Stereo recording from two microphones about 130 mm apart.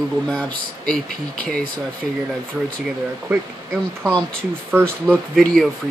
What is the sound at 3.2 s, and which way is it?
Speech, 15° right (ahead or behind).